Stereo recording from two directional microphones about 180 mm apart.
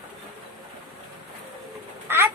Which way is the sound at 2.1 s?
15° right (ahead or behind).